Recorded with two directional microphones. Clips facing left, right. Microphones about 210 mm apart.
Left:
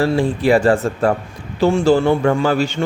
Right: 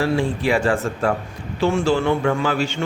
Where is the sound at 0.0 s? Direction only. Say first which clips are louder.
Left 4 dB; 35° left (ahead or behind).